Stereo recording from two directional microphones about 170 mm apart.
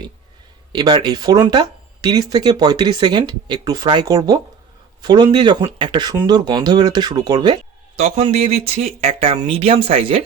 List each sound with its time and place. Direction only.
0.7 s speech: 25° right (ahead or behind)
7.9 s speech: 40° right (ahead or behind)